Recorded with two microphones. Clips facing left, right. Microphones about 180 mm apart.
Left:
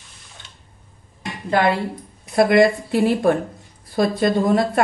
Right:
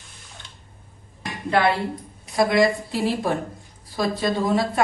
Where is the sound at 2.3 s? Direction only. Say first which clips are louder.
Left 4 dB; 60° left (ahead or behind).